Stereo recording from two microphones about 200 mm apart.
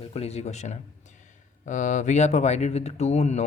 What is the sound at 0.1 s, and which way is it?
A man's voice, 30° left (ahead or behind).